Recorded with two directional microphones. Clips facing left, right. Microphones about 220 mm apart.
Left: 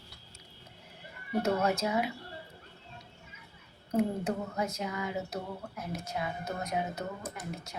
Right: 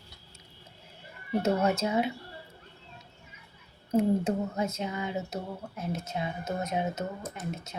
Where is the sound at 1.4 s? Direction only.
25° right (ahead or behind).